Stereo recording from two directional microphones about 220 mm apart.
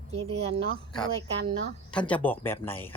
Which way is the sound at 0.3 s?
30° right (ahead or behind).